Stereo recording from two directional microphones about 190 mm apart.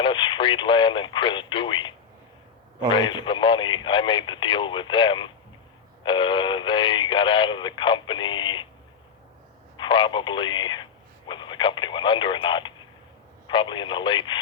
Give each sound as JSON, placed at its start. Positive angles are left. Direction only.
{"t": 0.0, "sound": "speech", "side_deg": 25}
{"t": 2.9, "sound": "speech", "side_deg": 25}
{"t": 9.7, "sound": "speech", "side_deg": 25}